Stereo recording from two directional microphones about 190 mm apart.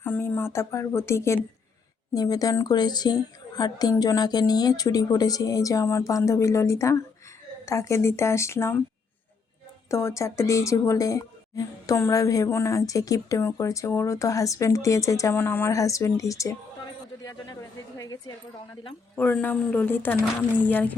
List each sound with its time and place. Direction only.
0.0 s a woman's voice: 10° left (ahead or behind)
9.9 s a woman's voice: 15° left (ahead or behind)